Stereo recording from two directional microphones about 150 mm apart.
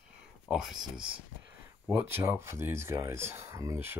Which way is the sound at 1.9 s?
15° right (ahead or behind).